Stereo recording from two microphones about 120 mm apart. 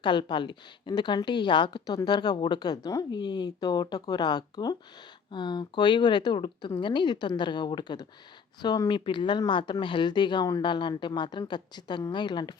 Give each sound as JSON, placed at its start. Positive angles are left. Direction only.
{"t": 0.0, "sound": "speech", "side_deg": 40}